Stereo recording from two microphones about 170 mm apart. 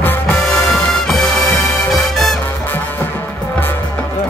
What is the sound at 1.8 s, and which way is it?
Music, centre (ahead or behind).